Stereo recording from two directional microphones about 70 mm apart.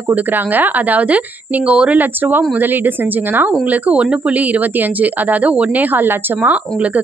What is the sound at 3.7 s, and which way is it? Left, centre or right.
Speech, centre.